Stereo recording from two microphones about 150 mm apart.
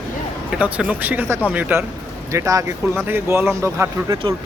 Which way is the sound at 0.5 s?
10° right (ahead or behind).